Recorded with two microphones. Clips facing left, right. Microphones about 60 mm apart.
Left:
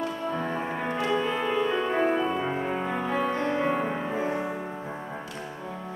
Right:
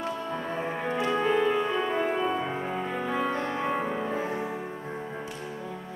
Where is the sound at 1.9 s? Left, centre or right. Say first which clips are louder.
Left 3 dB; left.